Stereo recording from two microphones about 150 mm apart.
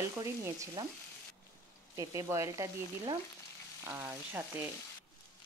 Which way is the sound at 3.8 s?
15° right (ahead or behind).